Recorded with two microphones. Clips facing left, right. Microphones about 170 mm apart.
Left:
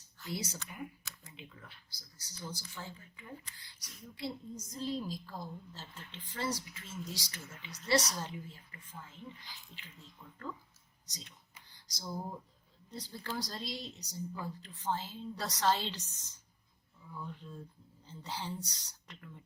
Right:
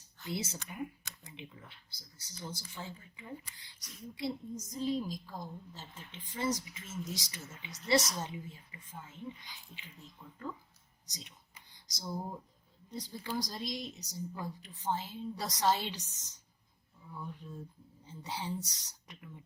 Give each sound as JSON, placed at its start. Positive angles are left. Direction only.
{"t": 0.3, "sound": "a woman's voice", "side_deg": -25}
{"t": 10.2, "sound": "a woman's voice", "side_deg": -10}
{"t": 17.1, "sound": "a woman's voice", "side_deg": -15}